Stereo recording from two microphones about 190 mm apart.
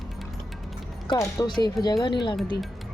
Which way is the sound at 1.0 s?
20° left (ahead or behind).